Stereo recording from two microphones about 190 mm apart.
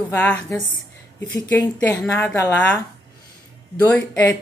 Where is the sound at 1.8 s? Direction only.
10° left (ahead or behind).